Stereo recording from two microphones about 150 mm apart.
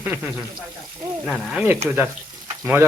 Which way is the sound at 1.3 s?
Centre (ahead or behind).